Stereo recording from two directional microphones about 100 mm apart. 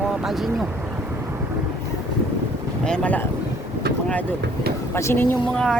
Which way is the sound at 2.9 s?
10° left (ahead or behind).